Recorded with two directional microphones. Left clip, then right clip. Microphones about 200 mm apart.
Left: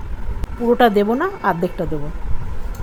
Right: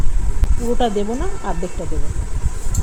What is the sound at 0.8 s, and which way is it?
Speech, 20° left (ahead or behind).